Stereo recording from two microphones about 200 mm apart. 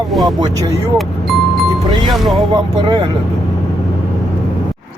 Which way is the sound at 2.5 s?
20° right (ahead or behind).